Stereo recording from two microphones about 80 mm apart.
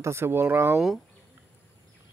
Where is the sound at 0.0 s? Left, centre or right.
Right.